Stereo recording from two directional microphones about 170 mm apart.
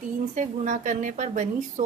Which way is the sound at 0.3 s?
45° right (ahead or behind).